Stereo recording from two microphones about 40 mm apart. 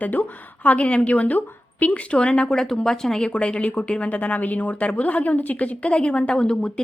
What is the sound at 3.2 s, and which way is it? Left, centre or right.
A woman's voice, left.